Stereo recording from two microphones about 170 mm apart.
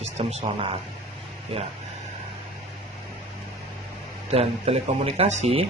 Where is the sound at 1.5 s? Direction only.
35° right (ahead or behind).